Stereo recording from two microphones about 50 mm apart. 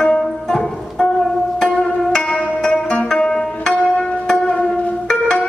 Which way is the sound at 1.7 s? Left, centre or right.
Centre.